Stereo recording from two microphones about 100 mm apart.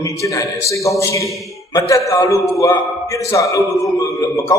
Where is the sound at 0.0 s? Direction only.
30° left (ahead or behind).